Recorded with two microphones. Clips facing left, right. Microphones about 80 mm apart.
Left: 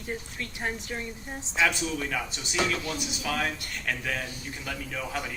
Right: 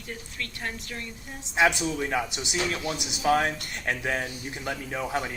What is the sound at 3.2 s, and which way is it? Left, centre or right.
A man's voice, right.